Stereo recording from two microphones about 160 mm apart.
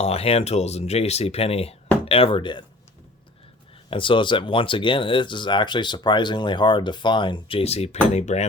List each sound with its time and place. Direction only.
0.0 s speech: 40° left (ahead or behind)
3.8 s speech: 30° left (ahead or behind)